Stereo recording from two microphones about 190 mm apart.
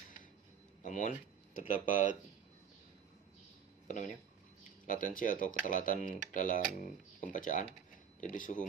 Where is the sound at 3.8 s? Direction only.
40° left (ahead or behind).